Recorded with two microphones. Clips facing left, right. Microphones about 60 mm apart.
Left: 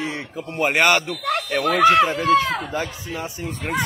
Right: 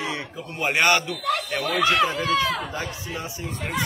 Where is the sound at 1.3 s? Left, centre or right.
Left.